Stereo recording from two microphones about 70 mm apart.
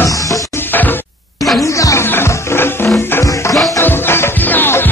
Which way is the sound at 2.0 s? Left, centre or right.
Left.